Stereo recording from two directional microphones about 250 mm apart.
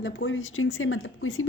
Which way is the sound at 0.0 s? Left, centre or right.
Left.